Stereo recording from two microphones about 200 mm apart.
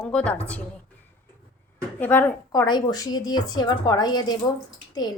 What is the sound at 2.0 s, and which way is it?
A woman's voice, 10° left (ahead or behind).